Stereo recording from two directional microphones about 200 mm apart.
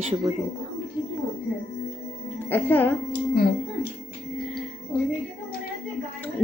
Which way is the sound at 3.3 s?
50° left (ahead or behind).